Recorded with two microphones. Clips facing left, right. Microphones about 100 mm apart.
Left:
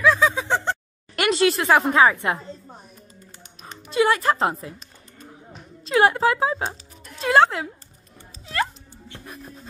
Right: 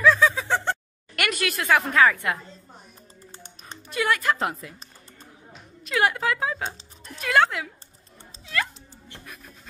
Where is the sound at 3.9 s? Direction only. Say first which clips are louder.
Left 5 dB; 25° left (ahead or behind).